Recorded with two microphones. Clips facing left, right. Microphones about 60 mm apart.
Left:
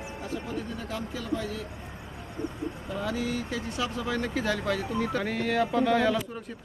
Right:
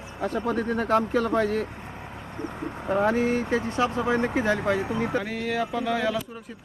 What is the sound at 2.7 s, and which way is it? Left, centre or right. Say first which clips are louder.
Speech: right 9 dB; right.